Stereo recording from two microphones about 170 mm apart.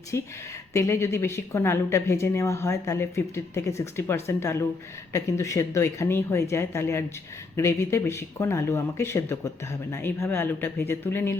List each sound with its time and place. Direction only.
0.1 s speech: 15° left (ahead or behind)